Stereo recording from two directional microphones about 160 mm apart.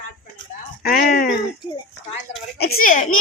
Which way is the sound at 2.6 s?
70° left (ahead or behind).